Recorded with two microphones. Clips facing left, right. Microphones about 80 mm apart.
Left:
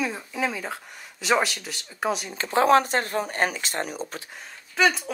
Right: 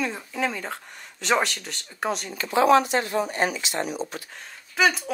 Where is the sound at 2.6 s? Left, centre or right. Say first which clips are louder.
Right 1 dB; left.